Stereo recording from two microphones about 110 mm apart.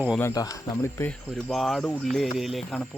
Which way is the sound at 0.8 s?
20° left (ahead or behind).